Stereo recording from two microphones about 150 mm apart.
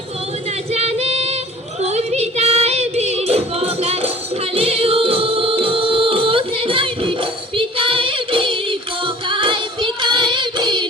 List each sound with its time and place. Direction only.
0.7 s female singing: 45° right (ahead or behind)
1.8 s music: 45° right (ahead or behind); by 10.8 s 30° right (ahead or behind)